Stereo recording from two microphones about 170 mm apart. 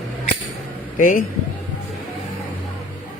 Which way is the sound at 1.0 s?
55° left (ahead or behind).